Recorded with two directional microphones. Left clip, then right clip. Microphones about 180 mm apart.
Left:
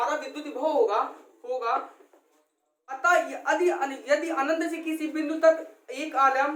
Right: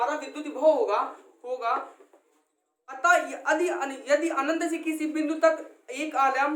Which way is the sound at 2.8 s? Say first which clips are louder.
Even; 25° right (ahead or behind).